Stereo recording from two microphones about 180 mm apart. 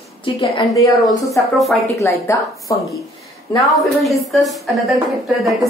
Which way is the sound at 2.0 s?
15° left (ahead or behind).